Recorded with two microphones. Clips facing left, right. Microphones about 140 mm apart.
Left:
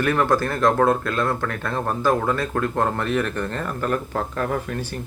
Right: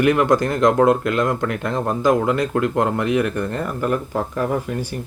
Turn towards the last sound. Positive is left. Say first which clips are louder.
# right 3 dB
turn(degrees=-10)  # may be behind; listen again after turning